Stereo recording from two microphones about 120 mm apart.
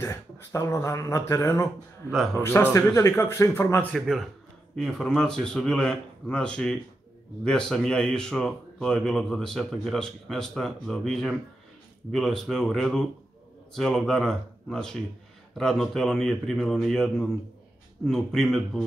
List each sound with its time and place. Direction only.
0.0 s speech: 25° left (ahead or behind)
3.9 s speech: centre (ahead or behind)